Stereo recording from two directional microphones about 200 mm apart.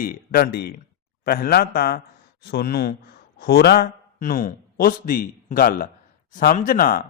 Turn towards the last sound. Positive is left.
turn(degrees=45)  # may be behind; listen again after turning